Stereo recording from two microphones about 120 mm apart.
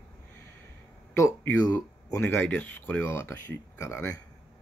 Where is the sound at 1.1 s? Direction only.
25° left (ahead or behind).